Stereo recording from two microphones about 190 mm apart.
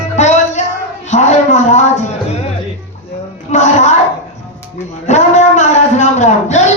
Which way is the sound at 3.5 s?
40° left (ahead or behind).